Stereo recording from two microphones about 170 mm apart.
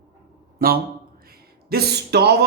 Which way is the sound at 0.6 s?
60° right (ahead or behind).